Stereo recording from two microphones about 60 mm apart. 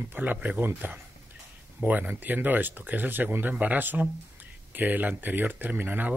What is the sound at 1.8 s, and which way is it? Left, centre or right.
Speech, right.